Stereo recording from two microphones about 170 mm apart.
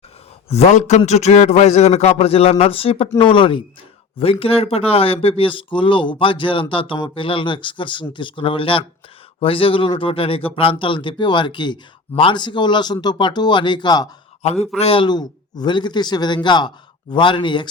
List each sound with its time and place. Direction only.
0.4 s speech: 40° left (ahead or behind)
14.4 s speech: 35° left (ahead or behind)